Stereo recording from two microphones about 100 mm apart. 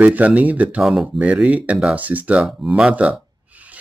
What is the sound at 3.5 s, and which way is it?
Rub, 15° right (ahead or behind).